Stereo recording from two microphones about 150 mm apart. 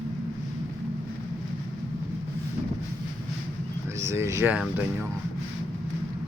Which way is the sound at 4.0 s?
20° right (ahead or behind).